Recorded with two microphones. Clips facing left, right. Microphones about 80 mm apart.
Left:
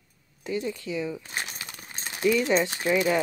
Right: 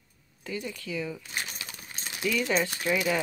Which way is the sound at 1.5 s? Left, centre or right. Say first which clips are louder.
Left 2 dB; left.